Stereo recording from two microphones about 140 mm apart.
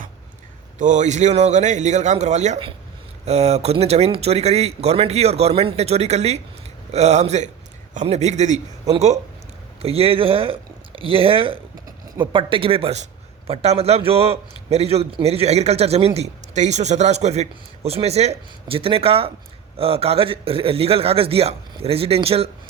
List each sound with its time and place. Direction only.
0.8 s a man's voice: 60° right (ahead or behind); by 22.4 s 45° right (ahead or behind)